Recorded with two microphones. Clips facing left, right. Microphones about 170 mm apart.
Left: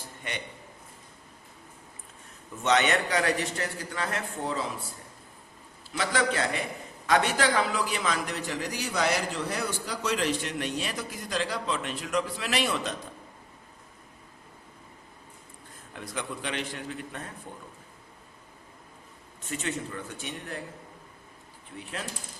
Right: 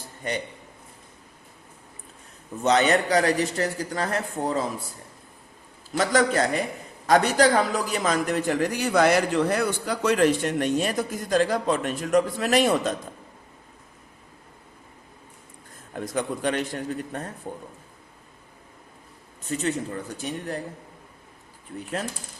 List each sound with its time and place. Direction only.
0.2 s a man's voice: 40° right (ahead or behind)
2.6 s a man's voice: 35° right (ahead or behind)
6.0 s a man's voice: 40° right (ahead or behind)
15.9 s a man's voice: 45° right (ahead or behind)
19.5 s a man's voice: 35° right (ahead or behind)